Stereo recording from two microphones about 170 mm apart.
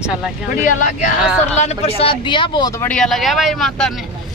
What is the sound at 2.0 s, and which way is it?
Speech, 30° left (ahead or behind).